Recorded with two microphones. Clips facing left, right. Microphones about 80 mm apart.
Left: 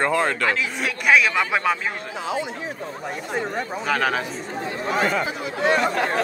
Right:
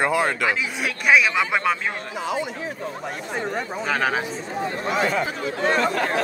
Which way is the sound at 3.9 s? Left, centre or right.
Right.